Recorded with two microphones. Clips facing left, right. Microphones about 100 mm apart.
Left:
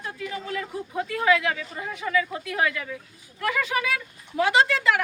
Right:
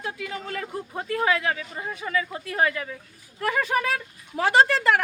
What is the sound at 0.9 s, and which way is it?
Speech, 30° right (ahead or behind).